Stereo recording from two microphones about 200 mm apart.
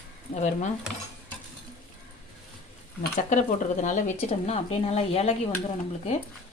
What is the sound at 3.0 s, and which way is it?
Speech, 40° left (ahead or behind).